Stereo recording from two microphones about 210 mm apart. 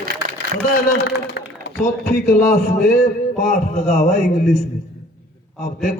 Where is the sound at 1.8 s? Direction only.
45° left (ahead or behind).